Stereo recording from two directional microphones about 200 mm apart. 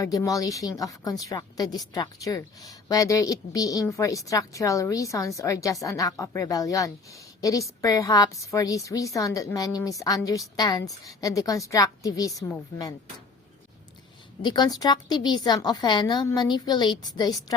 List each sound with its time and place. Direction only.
0.0 s speech: 15° left (ahead or behind)
14.4 s a woman's voice: 20° left (ahead or behind)